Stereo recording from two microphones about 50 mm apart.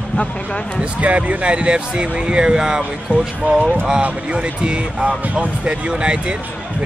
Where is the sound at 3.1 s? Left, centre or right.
Right.